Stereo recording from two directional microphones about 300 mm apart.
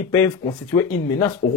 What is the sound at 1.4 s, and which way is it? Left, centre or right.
Speech, left.